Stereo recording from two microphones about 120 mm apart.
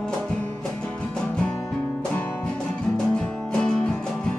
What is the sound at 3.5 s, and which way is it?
Music, 5° left (ahead or behind).